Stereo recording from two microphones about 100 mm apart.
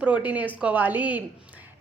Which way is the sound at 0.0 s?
15° right (ahead or behind).